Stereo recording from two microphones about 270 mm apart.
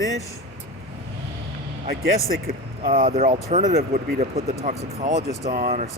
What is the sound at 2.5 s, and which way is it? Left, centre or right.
Speech, right.